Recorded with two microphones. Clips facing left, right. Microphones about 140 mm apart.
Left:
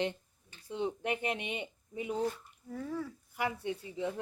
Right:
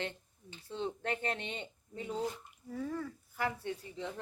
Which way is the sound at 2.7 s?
Centre (ahead or behind).